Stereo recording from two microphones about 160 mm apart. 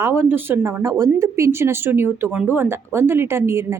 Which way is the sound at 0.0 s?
15° right (ahead or behind).